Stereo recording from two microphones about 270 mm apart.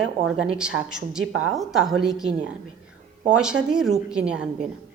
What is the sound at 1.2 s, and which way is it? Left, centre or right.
Speech, right.